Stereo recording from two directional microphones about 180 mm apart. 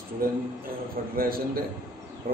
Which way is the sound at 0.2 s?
55° right (ahead or behind).